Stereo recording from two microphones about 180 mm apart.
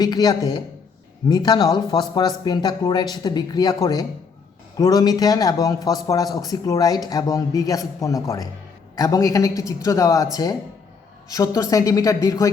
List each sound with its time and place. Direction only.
0.0 s speech: 20° left (ahead or behind)
11.3 s speech: 20° left (ahead or behind)